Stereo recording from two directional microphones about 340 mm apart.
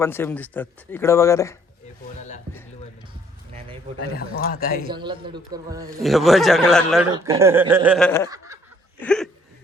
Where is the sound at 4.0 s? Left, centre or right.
Left.